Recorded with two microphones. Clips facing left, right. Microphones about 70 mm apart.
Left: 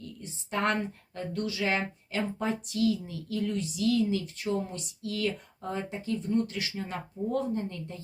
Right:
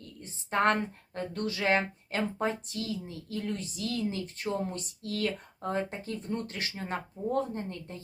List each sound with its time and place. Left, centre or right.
0.0 s speech: right